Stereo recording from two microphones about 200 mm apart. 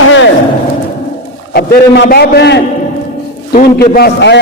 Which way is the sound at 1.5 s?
50° left (ahead or behind).